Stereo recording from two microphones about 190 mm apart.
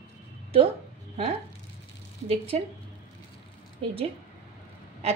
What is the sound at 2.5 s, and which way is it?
Speech, 35° right (ahead or behind).